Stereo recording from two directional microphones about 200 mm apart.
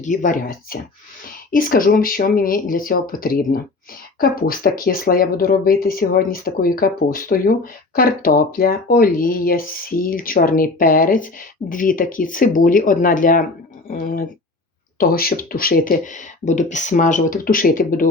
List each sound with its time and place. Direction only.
0.0 s speech: 40° left (ahead or behind)